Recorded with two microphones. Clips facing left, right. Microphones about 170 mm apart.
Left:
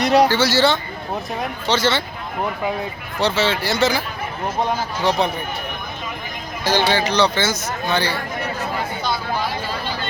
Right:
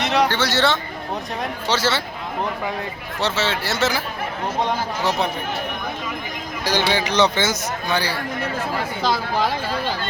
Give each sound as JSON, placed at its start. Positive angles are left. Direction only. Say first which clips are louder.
{"t": 0.0, "sound": "a man's voice", "louder": "left 5 dB", "side_deg": 35}
{"t": 0.3, "sound": "speech", "louder": "left 3 dB", "side_deg": 5}
{"t": 3.2, "sound": "speech", "louder": "left 3 dB", "side_deg": 0}
{"t": 6.7, "sound": "speech", "louder": "left 1 dB", "side_deg": -15}
{"t": 9.0, "sound": "a sound", "louder": "right 2 dB", "side_deg": -90}